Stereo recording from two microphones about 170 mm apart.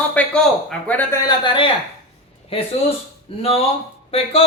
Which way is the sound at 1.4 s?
30° left (ahead or behind).